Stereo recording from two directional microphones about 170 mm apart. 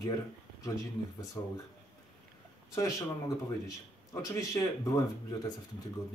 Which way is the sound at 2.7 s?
20° left (ahead or behind).